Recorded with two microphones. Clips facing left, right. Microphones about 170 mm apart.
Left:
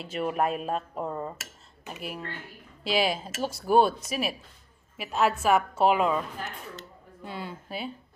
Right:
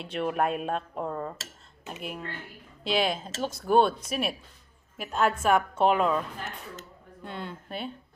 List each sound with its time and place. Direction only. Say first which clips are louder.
0.0 s speech: even; centre (ahead or behind)
7.3 s speech: even; 5° left (ahead or behind)